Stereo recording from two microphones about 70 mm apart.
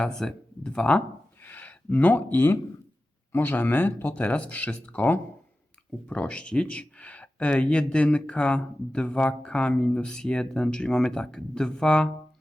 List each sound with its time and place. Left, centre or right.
0.0 s speech: centre
1.4 s a sound: left
3.3 s speech: left; by 12.1 s centre